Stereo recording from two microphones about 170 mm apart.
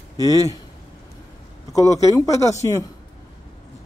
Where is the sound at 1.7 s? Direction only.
20° left (ahead or behind).